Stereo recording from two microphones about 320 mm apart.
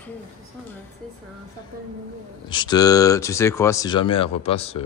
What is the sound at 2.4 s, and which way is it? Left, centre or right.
Speech, centre.